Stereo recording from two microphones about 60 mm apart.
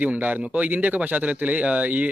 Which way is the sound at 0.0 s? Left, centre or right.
Right.